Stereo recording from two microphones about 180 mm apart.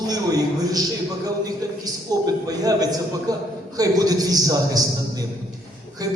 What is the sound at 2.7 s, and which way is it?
A man's voice, 20° right (ahead or behind).